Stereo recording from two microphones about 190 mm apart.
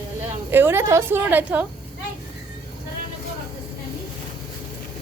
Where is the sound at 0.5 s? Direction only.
10° right (ahead or behind).